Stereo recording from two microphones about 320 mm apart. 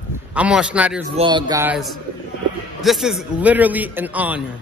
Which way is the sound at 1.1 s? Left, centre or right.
Centre.